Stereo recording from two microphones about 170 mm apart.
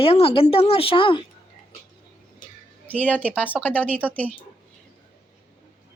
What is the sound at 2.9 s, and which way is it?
A woman's voice, 10° left (ahead or behind).